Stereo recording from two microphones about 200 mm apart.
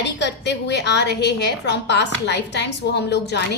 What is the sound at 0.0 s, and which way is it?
A woman's voice, 60° left (ahead or behind).